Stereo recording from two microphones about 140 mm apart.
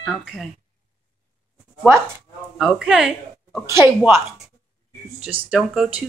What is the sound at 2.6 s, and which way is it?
Speech, 5° right (ahead or behind).